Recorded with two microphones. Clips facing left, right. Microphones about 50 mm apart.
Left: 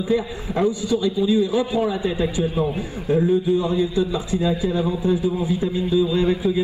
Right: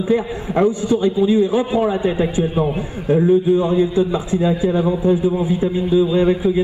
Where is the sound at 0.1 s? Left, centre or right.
Right.